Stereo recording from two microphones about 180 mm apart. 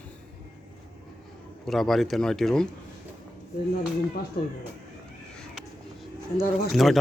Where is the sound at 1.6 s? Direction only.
Centre (ahead or behind).